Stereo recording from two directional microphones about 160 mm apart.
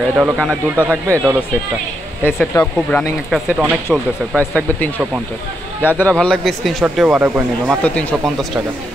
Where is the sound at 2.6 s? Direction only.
10° left (ahead or behind).